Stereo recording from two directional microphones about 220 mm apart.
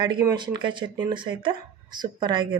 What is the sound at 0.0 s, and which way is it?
Speech, 20° right (ahead or behind).